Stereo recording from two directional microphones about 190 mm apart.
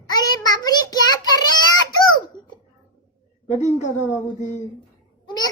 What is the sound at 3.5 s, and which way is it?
Speech, 35° left (ahead or behind).